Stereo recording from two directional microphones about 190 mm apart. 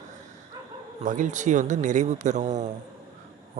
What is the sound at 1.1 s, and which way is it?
Speech, 40° right (ahead or behind).